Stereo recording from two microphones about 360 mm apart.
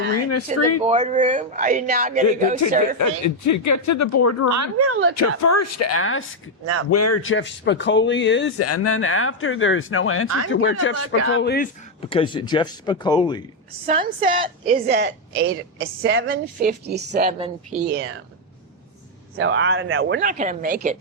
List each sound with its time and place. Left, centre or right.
0.1 s a sound: left
0.9 s a woman's voice: centre
3.0 s speech: left
4.5 s speech: right
5.4 s speech: left; by 13.4 s centre
13.8 s a woman's voice: centre
14.8 s a woman's voice: right
19.4 s a woman's voice: right